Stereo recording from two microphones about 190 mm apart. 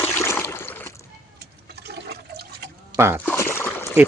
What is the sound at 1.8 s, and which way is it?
Toilet flush, 55° right (ahead or behind).